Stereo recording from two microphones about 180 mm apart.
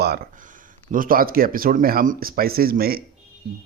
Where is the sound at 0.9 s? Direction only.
50° right (ahead or behind).